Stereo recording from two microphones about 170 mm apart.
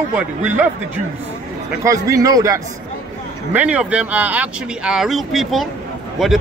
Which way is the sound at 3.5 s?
10° right (ahead or behind).